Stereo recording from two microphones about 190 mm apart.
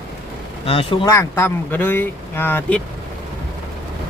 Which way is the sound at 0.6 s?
30° left (ahead or behind).